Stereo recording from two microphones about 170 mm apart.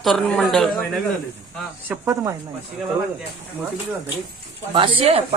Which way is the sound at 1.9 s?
15° right (ahead or behind).